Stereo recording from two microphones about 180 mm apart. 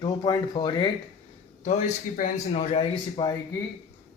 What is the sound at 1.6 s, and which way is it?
Speech, 45° left (ahead or behind).